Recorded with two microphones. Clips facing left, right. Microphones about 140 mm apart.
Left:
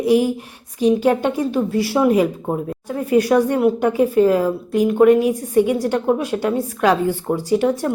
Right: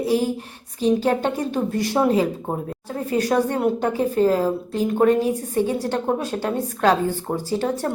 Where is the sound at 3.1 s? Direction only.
10° left (ahead or behind).